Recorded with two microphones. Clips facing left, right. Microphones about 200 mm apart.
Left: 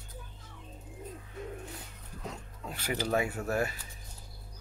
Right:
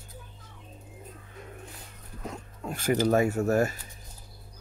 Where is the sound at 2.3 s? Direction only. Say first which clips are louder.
Right 6 dB; 45° right (ahead or behind).